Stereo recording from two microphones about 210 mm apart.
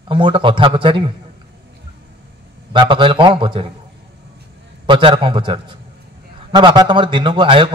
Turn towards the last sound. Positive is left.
turn(degrees=-25)  # may be behind; listen again after turning